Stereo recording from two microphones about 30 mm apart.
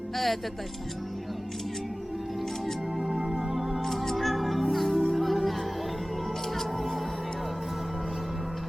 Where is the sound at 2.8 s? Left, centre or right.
Centre.